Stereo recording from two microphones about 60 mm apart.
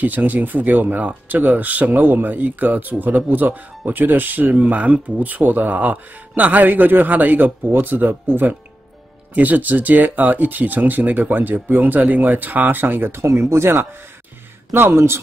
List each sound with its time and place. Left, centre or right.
0.0 s speech: right